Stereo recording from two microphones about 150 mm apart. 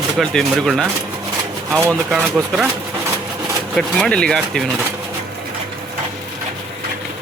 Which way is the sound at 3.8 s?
5° left (ahead or behind).